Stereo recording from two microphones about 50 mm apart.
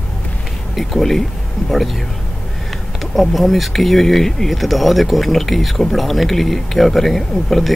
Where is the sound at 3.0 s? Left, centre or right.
Centre.